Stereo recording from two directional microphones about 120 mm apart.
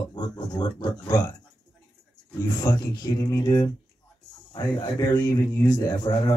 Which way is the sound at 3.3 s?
35° left (ahead or behind).